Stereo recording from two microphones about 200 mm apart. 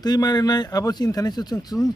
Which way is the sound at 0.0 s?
20° left (ahead or behind).